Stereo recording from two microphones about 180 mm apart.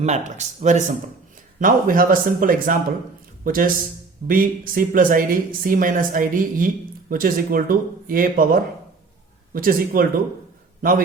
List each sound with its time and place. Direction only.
0.0 s a woman's voice: 40° right (ahead or behind)